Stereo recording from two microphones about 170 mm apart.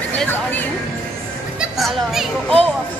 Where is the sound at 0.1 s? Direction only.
10° left (ahead or behind).